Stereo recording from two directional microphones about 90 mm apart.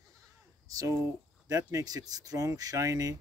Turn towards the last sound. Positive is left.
turn(degrees=-40)  # may be behind; listen again after turning